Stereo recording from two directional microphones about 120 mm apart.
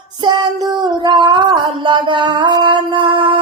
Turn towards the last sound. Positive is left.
turn(degrees=-45)  # may be behind; listen again after turning